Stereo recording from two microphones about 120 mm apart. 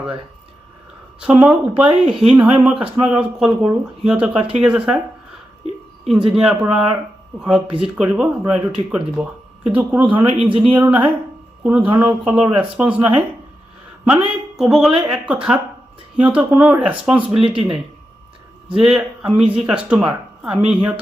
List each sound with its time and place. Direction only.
1.2 s speech: 10° right (ahead or behind)
6.1 s a woman's voice: 5° right (ahead or behind)
18.8 s speech: 5° right (ahead or behind)